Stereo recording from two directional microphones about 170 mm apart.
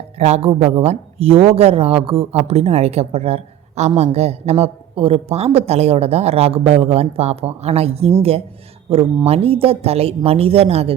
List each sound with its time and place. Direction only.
0.2 s speech: 35° right (ahead or behind)